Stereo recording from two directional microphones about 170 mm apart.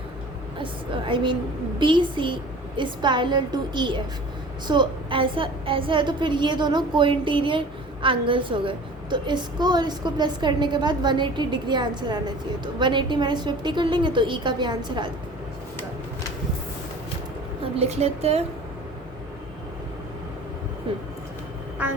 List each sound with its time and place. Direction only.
0.6 s a woman's voice: 30° right (ahead or behind)
17.7 s a woman's voice: 40° right (ahead or behind)